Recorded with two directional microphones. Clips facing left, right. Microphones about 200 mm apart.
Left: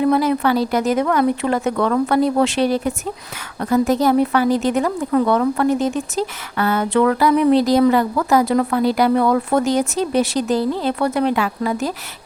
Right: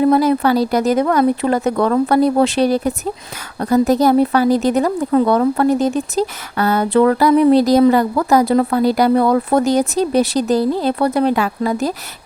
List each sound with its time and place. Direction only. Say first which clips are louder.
0.0 s speech: right 3 dB; 40° right (ahead or behind)